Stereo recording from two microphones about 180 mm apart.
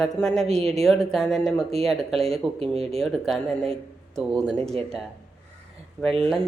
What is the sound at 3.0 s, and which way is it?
Speech, centre (ahead or behind).